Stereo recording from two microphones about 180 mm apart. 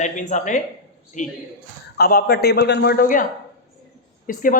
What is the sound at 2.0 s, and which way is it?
Speech, 60° left (ahead or behind).